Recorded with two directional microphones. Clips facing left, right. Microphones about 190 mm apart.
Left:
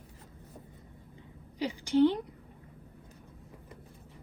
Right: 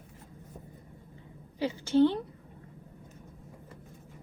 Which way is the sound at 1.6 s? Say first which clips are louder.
Right 1 dB; 15° left (ahead or behind).